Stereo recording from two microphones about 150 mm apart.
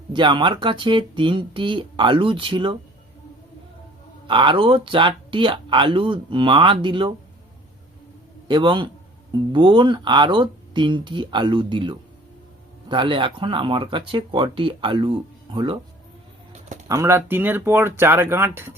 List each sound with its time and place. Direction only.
0.1 s speech: 30° right (ahead or behind)
4.3 s speech: 35° right (ahead or behind)
8.4 s speech: 30° right (ahead or behind)
16.9 s speech: 20° right (ahead or behind)